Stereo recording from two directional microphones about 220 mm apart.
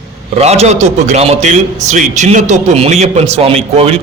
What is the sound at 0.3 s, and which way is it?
A man's voice, 30° right (ahead or behind).